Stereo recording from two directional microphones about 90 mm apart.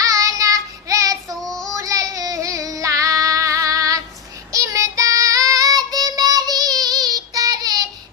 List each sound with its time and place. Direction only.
0.0 s child singing: 40° right (ahead or behind)
1.4 s child singing: 5° left (ahead or behind)
1.7 s child singing: 40° right (ahead or behind)